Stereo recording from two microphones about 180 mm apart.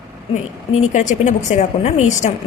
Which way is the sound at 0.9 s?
40° left (ahead or behind).